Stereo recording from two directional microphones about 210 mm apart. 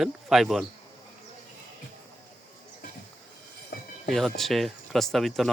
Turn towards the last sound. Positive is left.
turn(degrees=0)  # may be behind; listen again after turning